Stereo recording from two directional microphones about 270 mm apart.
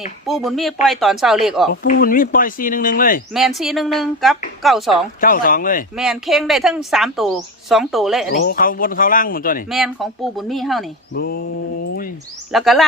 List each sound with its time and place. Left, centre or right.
0.3 s speech: centre
1.7 s speech: left
3.3 s speech: centre
5.2 s speech: left
6.0 s speech: centre
8.4 s speech: left
9.6 s speech: centre
11.1 s speech: left
12.5 s speech: centre